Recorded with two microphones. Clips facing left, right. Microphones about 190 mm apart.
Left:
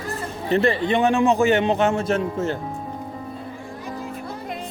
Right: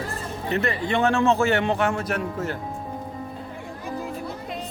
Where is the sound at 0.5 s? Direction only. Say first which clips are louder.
Left 6 dB; 30° left (ahead or behind).